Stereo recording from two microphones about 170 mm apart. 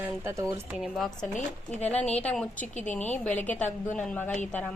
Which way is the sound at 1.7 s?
40° left (ahead or behind).